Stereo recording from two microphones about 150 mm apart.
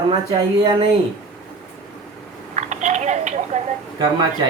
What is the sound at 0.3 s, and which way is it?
Speech, 25° right (ahead or behind).